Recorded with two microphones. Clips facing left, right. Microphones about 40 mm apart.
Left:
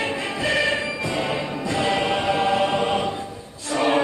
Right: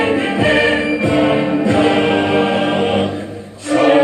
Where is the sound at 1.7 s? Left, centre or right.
Right.